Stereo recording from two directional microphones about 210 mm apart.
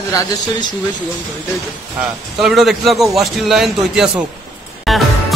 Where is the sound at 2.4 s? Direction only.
Centre (ahead or behind).